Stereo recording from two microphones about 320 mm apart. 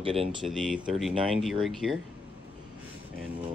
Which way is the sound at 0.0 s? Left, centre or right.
Centre.